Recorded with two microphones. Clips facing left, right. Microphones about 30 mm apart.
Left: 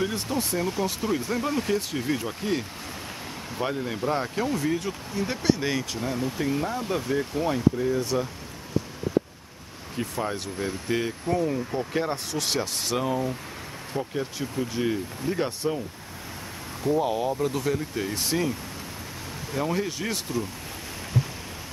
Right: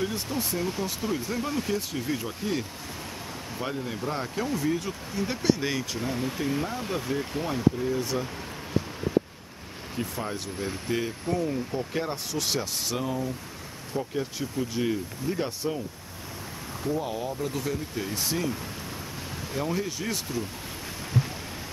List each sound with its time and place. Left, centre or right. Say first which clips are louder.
0.0 s speech: left 2 dB; centre
3.6 s speech: left 4 dB; centre
9.9 s speech: left 3 dB; centre
11.9 s speech: left 3 dB; centre; by 14.1 s left
14.6 s speech: left 1 dB; centre
16.8 s speech: left 6 dB; left
19.5 s speech: left 3 dB; centre